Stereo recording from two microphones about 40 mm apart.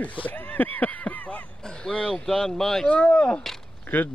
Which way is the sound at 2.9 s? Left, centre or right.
Left.